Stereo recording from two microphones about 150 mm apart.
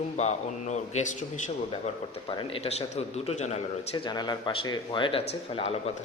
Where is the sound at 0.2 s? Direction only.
50° left (ahead or behind).